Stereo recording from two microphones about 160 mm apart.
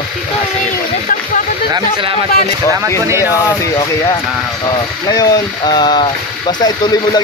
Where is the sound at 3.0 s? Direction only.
15° right (ahead or behind).